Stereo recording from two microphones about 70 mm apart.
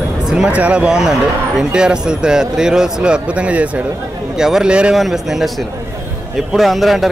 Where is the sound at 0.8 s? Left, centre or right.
Centre.